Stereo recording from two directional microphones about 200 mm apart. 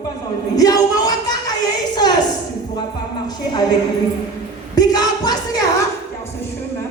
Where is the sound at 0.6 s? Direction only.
20° left (ahead or behind).